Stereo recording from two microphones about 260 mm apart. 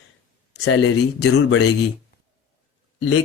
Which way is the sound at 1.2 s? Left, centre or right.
Left.